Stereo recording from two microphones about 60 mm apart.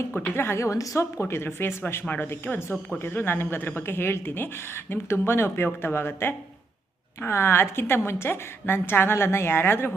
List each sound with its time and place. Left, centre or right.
0.2 s a woman's voice: left
1.2 s a woman's voice: left